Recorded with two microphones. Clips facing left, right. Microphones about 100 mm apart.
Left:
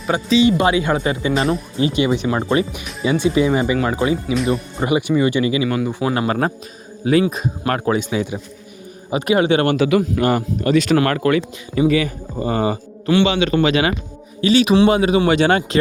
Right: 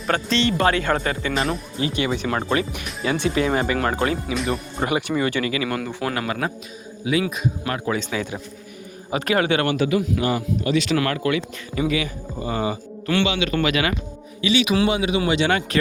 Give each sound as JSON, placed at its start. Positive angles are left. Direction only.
{"t": 0.1, "sound": "speech", "side_deg": 10}
{"t": 1.3, "sound": "speech", "side_deg": 0}
{"t": 1.8, "sound": "a man's voice", "side_deg": 20}
{"t": 2.7, "sound": "speech", "side_deg": 5}
{"t": 4.4, "sound": "speech", "side_deg": 0}
{"t": 4.9, "sound": "speech", "side_deg": 10}
{"t": 6.1, "sound": "speech", "side_deg": 40}
{"t": 7.9, "sound": "a man's voice", "side_deg": 15}
{"t": 9.7, "sound": "a man's voice", "side_deg": 90}
{"t": 10.0, "sound": "speech", "side_deg": 50}
{"t": 14.4, "sound": "speech", "side_deg": 40}